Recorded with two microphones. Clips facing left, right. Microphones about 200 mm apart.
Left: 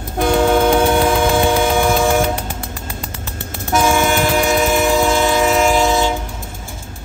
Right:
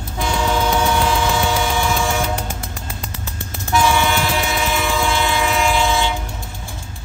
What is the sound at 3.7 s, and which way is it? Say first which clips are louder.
Train: left 2 dB; 45° left (ahead or behind).